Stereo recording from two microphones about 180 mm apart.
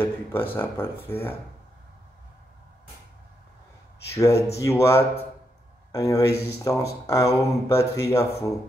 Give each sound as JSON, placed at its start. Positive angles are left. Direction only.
{"t": 0.0, "sound": "speech", "side_deg": 10}
{"t": 4.2, "sound": "speech", "side_deg": 15}